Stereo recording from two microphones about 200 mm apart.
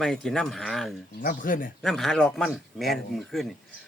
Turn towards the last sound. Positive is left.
turn(degrees=0)  # may be behind; listen again after turning